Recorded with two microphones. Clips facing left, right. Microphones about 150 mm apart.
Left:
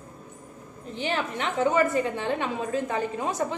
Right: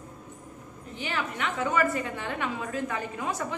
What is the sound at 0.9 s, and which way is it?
A woman's voice, 25° left (ahead or behind).